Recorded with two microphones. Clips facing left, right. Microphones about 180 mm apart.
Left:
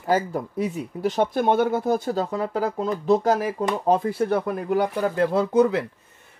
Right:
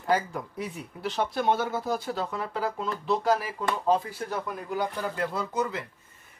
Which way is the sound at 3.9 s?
60° left (ahead or behind).